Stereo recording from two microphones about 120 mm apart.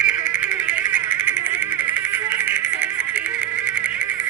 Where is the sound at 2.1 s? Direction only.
15° right (ahead or behind).